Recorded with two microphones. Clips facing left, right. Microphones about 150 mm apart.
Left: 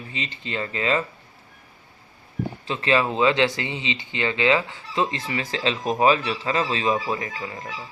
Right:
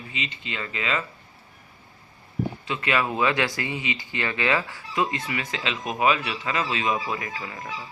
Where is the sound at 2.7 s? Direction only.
30° left (ahead or behind).